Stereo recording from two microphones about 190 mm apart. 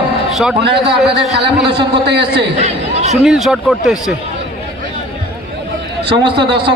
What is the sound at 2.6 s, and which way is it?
Chatter, 35° right (ahead or behind).